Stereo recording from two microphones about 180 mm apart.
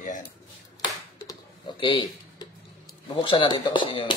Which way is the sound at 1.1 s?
25° left (ahead or behind).